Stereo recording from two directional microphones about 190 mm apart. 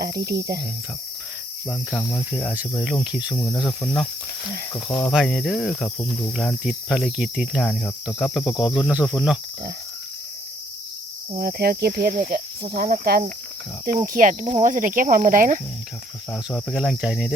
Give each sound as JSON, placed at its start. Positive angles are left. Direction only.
{"t": 0.0, "sound": "cricket", "side_deg": -55}
{"t": 1.6, "sound": "cricket", "side_deg": 5}
{"t": 2.3, "sound": "cricket", "side_deg": -5}
{"t": 3.3, "sound": "cricket", "side_deg": 15}
{"t": 3.6, "sound": "cricket", "side_deg": 0}
{"t": 4.7, "sound": "cricket", "side_deg": 10}
{"t": 5.0, "sound": "cricket", "side_deg": 0}
{"t": 11.3, "sound": "speech", "side_deg": -55}
{"t": 13.8, "sound": "cricket", "side_deg": -45}
{"t": 16.3, "sound": "cricket", "side_deg": 5}